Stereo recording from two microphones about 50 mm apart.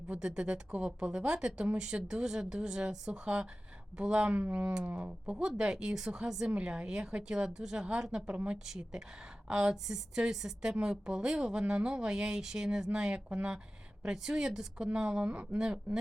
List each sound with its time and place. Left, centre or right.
0.1 s a woman's voice: centre
8.3 s speech: right
8.6 s a woman's voice: centre